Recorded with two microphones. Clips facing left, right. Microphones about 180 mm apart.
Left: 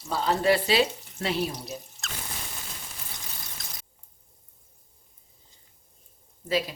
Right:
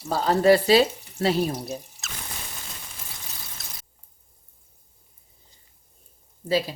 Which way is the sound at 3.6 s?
5° right (ahead or behind).